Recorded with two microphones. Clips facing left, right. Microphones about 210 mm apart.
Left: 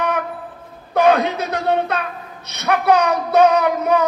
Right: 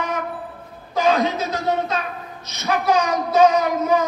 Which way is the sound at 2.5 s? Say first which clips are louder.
Left 3 dB; 60° left (ahead or behind).